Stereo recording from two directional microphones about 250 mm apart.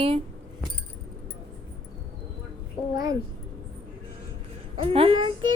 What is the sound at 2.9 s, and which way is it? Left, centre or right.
Speech, centre.